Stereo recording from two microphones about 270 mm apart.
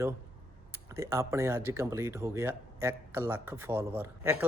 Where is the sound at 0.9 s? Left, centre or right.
Centre.